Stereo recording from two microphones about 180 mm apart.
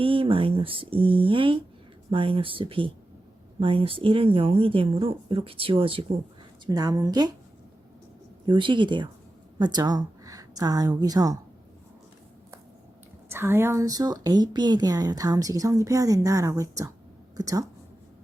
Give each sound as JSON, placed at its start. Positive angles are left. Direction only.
{"t": 0.0, "sound": "speech", "side_deg": -30}
{"t": 8.4, "sound": "a woman's voice", "side_deg": -25}
{"t": 13.3, "sound": "speech", "side_deg": -15}